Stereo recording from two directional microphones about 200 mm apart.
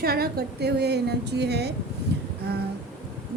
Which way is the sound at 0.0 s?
50° right (ahead or behind).